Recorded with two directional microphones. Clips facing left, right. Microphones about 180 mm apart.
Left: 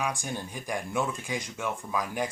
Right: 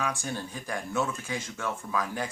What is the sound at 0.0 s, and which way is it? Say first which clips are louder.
Speech: even; 15° left (ahead or behind).